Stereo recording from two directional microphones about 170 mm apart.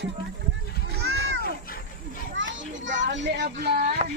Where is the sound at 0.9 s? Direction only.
85° right.